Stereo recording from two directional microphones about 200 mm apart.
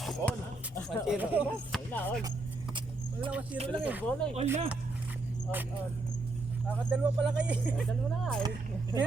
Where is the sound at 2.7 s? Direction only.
25° right (ahead or behind).